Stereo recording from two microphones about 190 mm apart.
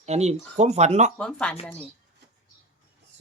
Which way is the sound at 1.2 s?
5° left (ahead or behind).